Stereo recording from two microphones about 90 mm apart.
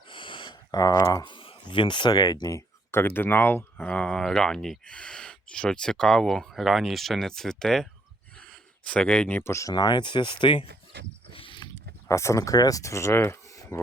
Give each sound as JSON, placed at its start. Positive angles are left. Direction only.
{"t": 0.1, "sound": "a sound", "side_deg": 65}
{"t": 0.7, "sound": "speech", "side_deg": 45}
{"t": 1.2, "sound": "speech", "side_deg": 70}
{"t": 2.6, "sound": "speech", "side_deg": 25}
{"t": 8.4, "sound": "a sound", "side_deg": 10}
{"t": 9.4, "sound": "speech", "side_deg": 35}
{"t": 9.7, "sound": "speech", "side_deg": 55}
{"t": 11.3, "sound": "a sound", "side_deg": 75}
{"t": 12.0, "sound": "speech", "side_deg": 35}